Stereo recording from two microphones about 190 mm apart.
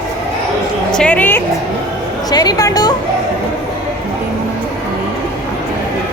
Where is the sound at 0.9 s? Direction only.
5° left (ahead or behind).